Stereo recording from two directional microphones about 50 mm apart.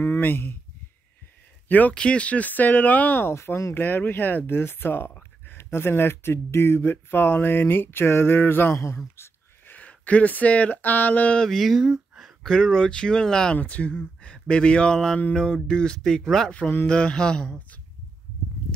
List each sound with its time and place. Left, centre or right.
0.2 s speech: left
1.7 s speech: left
3.3 s speech: left
3.8 s speech: left
4.5 s speech: left
5.6 s speech: left
8.7 s speech: left
9.7 s speech: left
11.5 s speech: centre
12.4 s speech: centre
13.6 s speech: left
14.2 s speech: left
16.8 s mantra: left